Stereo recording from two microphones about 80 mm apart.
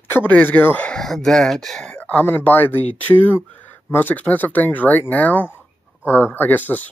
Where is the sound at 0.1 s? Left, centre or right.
Left.